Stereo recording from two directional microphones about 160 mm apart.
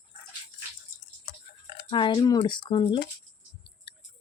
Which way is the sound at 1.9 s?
30° left (ahead or behind).